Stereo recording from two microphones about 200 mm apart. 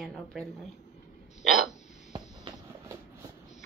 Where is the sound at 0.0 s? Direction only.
Centre (ahead or behind).